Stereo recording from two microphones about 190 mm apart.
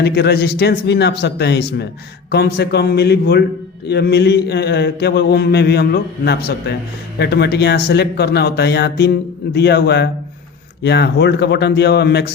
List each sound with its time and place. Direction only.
0.0 s mantra: 60° left (ahead or behind)